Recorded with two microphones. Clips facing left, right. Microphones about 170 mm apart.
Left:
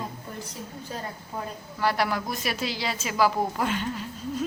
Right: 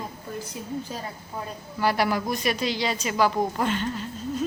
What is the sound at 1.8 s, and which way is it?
A woman's voice, centre (ahead or behind).